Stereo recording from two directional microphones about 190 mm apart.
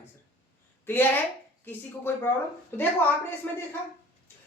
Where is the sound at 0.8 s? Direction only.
10° left (ahead or behind).